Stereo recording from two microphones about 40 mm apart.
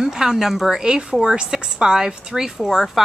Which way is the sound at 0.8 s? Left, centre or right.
Right.